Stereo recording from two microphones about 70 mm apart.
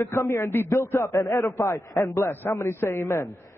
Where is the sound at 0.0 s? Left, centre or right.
Left.